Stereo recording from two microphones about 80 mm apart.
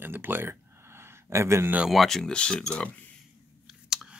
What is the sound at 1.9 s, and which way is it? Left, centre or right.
Speech, centre.